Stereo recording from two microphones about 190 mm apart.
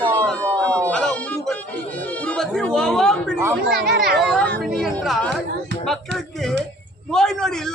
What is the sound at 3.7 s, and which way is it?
Speech, 60° right (ahead or behind).